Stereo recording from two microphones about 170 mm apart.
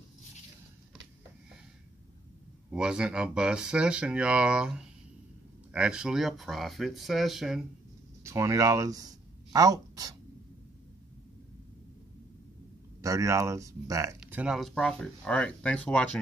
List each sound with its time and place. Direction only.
2.7 s speech: 5° right (ahead or behind)
8.2 s speech: 15° right (ahead or behind)
13.0 s speech: 20° right (ahead or behind)
14.2 s speech: 5° right (ahead or behind)